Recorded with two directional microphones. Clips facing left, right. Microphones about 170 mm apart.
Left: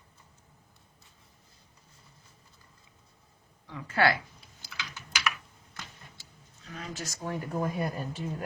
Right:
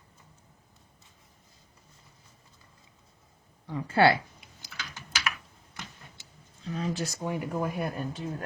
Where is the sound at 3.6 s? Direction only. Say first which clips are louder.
Right 4 dB; 35° right (ahead or behind).